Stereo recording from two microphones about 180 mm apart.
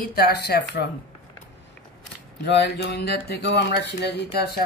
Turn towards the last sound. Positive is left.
turn(degrees=60)  # may be behind; listen again after turning